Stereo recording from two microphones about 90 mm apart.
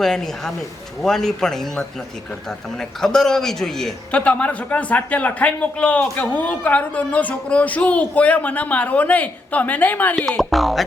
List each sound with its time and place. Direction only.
0.0 s a man's voice: 5° left (ahead or behind)
4.2 s speech: 15° left (ahead or behind)
10.2 s a man's voice: 5° left (ahead or behind)